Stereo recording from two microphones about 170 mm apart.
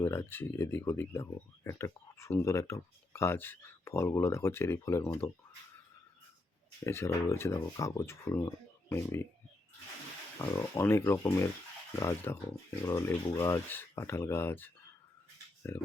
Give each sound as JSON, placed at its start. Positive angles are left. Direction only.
{"t": 0.0, "sound": "speech", "side_deg": 15}
{"t": 6.8, "sound": "speech", "side_deg": 15}
{"t": 10.3, "sound": "speech", "side_deg": 20}
{"t": 15.7, "sound": "speech", "side_deg": 15}